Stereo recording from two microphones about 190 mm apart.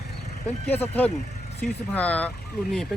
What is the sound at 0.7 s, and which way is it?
Speech, 10° left (ahead or behind).